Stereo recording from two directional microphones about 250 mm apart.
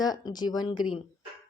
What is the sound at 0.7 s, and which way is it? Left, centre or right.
Speech, centre.